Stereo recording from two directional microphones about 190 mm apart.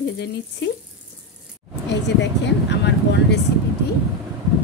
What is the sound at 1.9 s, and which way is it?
Speech, 65° left (ahead or behind).